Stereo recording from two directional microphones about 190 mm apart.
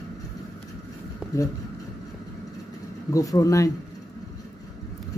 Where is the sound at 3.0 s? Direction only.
20° left (ahead or behind).